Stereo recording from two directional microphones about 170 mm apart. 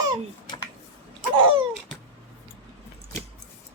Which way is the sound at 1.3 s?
30° right (ahead or behind).